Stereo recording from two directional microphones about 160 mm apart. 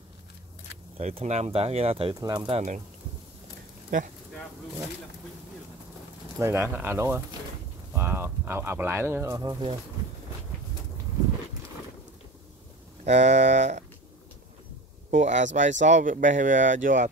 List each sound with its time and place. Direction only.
0.9 s speech: 45° right (ahead or behind)
2.1 s speech: 25° right (ahead or behind)
2.5 s speech: 45° right (ahead or behind)
3.9 s speech: 55° right (ahead or behind)
6.3 s speech: 15° right (ahead or behind)
13.0 s speech: 45° right (ahead or behind)
15.0 s speech: 50° right (ahead or behind)